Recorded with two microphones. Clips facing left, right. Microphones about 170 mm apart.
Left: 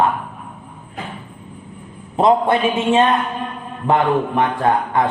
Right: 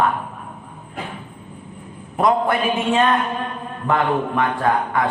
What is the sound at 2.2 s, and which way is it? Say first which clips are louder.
Speech: left 3 dB; 25° left (ahead or behind).